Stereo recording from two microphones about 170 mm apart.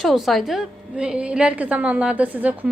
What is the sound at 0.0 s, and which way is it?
A woman's voice, centre (ahead or behind).